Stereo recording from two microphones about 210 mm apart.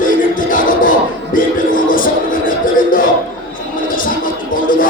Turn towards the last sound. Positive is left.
turn(degrees=40)  # may be behind; listen again after turning